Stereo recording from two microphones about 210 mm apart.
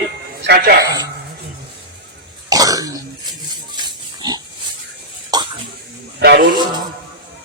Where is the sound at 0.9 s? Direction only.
15° right (ahead or behind).